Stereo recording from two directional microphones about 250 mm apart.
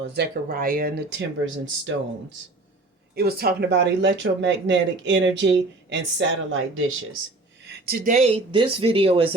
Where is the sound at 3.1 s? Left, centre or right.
Right.